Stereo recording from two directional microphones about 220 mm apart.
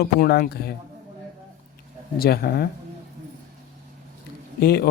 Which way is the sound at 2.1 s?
45° left (ahead or behind).